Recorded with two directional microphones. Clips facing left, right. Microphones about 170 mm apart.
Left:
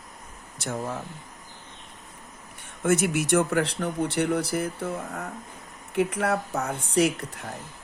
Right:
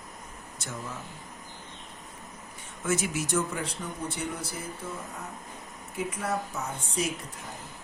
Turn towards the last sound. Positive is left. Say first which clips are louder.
# left 8 dB
turn(degrees=70)  # may be behind; listen again after turning